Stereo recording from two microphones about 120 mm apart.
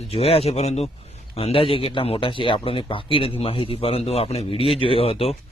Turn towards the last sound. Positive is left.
turn(degrees=55)  # may be behind; listen again after turning